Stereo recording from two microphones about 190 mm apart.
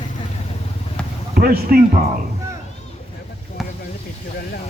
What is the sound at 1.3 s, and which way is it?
Speech, 50° right (ahead or behind).